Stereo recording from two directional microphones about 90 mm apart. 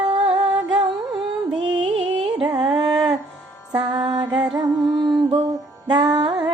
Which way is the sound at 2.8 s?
50° right (ahead or behind).